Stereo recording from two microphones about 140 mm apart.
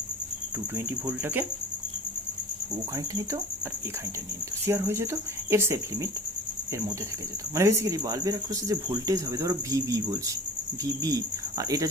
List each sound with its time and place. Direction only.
0.9 s speech: 15° right (ahead or behind)
2.9 s speech: 25° right (ahead or behind)
4.6 s speech: 20° right (ahead or behind)
7.5 s speech: 20° right (ahead or behind)